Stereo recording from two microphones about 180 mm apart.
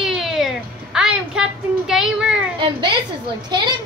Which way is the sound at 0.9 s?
5° right (ahead or behind).